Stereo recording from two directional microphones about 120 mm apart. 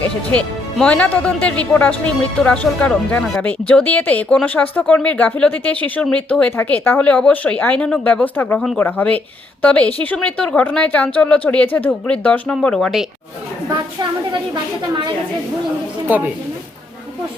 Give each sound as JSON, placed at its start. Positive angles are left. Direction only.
{"t": 0.3, "sound": "speech", "side_deg": 10}
{"t": 14.5, "sound": "a woman's voice", "side_deg": -40}
{"t": 16.0, "sound": "a woman's voice", "side_deg": -15}